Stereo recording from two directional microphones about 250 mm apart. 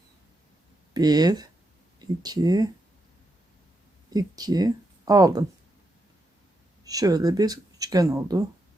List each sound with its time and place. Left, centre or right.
0.9 s speech: centre
4.1 s speech: centre
6.8 s speech: centre